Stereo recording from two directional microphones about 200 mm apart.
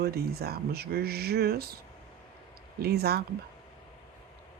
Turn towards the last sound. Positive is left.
turn(degrees=-55)  # may be behind; listen again after turning